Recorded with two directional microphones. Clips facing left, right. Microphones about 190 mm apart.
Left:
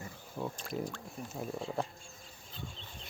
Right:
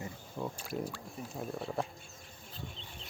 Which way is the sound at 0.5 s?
5° right (ahead or behind).